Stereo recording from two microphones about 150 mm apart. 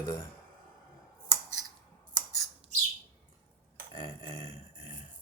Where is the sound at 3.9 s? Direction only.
30° left (ahead or behind).